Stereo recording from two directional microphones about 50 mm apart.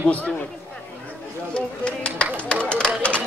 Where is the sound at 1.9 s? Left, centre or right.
Left.